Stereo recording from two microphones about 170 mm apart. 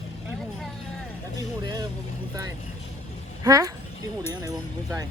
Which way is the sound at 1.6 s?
20° right (ahead or behind).